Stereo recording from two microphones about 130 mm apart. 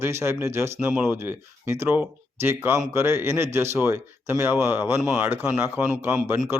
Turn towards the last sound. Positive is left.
turn(degrees=-15)  # may be behind; listen again after turning